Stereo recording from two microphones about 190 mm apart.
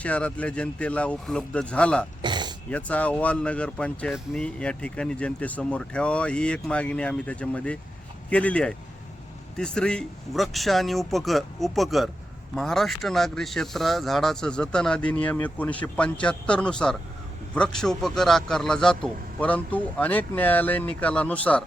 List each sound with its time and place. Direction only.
0.0 s a man's voice: 5° left (ahead or behind)
2.2 s a sound: 25° right (ahead or behind)
2.6 s a man's voice: 5° left (ahead or behind)